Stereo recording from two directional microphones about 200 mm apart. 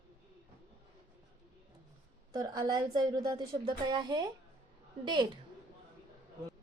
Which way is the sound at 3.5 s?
30° right (ahead or behind).